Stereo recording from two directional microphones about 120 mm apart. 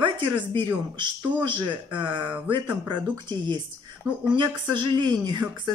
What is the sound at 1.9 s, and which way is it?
Speech, 40° right (ahead or behind).